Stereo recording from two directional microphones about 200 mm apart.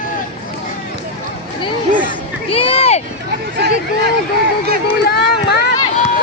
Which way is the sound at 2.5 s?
30° left (ahead or behind).